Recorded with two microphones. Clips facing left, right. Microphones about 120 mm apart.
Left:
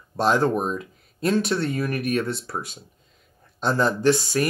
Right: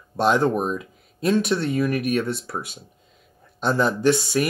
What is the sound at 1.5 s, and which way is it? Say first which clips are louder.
Speech: right 3 dB; 25° right (ahead or behind).